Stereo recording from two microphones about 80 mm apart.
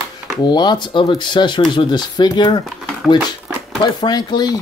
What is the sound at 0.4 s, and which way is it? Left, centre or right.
Speech, left.